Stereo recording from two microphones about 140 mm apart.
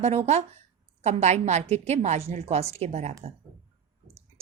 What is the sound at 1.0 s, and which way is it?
A woman's voice, 55° right (ahead or behind).